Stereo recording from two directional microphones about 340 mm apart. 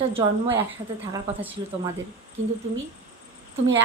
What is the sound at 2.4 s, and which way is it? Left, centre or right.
Speech, right.